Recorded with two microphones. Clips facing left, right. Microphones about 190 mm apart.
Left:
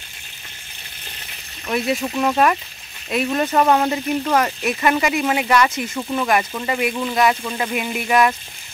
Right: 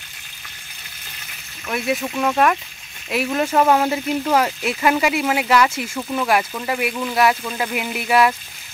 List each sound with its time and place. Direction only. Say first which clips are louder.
1.7 s speech: left 1 dB; centre (ahead or behind)